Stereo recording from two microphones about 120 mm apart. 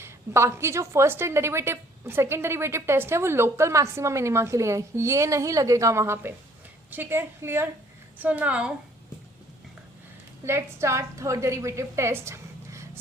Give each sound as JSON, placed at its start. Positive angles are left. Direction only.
{"t": 0.0, "sound": "a woman's voice", "side_deg": -20}
{"t": 10.4, "sound": "a woman's voice", "side_deg": -20}